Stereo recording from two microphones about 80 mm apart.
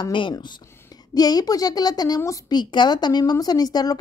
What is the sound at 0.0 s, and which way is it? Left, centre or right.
Speech, left.